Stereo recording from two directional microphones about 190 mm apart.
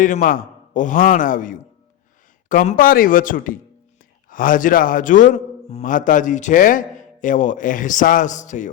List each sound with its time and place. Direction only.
0.0 s a man's voice: 45° left (ahead or behind)